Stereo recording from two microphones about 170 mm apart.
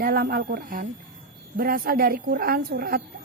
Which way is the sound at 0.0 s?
60° right (ahead or behind).